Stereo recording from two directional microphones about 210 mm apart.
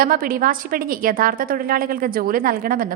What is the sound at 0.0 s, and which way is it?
A woman's voice, 45° right (ahead or behind).